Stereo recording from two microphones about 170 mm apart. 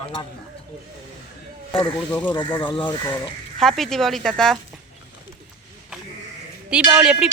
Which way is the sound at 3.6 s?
Centre (ahead or behind).